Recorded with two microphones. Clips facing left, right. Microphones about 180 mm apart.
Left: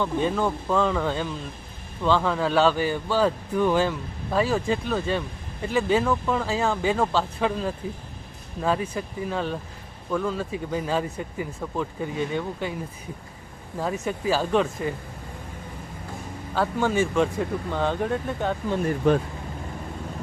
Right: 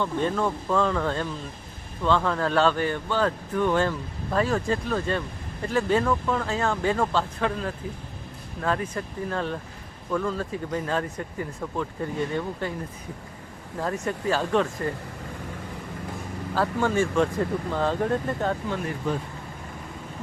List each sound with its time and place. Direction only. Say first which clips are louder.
0.0 s speech: left 1 dB; 5° left (ahead or behind)
8.6 s speech: left 2 dB; 5° left (ahead or behind)
13.7 s speech: left 1 dB; 5° left (ahead or behind)
16.6 s speech: left 1 dB; centre (ahead or behind)
19.1 s speech: left 8 dB; 65° left (ahead or behind)